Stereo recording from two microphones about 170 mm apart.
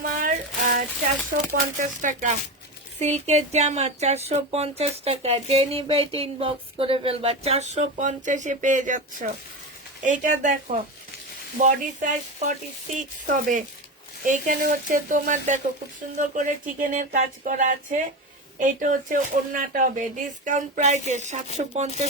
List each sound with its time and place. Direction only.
0.0 s child singing: 50° right (ahead or behind)
1.8 s speech: 50° right (ahead or behind)